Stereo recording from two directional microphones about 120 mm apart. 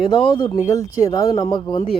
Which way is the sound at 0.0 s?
40° left (ahead or behind).